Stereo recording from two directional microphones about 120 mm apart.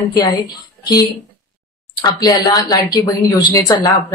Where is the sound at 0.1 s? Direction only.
35° left (ahead or behind).